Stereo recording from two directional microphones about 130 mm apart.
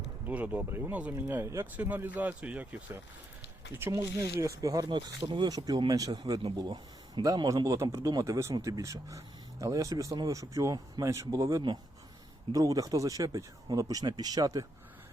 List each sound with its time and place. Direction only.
0.3 s speech: 10° right (ahead or behind); by 14.7 s 25° right (ahead or behind)